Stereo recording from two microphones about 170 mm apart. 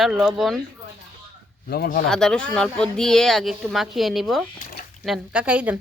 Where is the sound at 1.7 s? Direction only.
65° left (ahead or behind).